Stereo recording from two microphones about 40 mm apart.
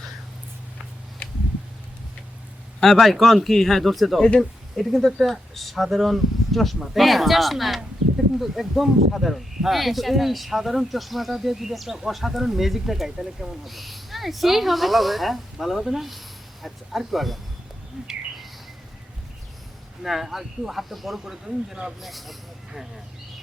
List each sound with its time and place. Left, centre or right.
2.8 s speech: centre
18.0 s bird: right
20.0 s speech: centre